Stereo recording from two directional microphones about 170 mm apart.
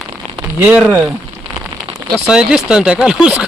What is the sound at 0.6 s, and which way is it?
Speech, 5° right (ahead or behind).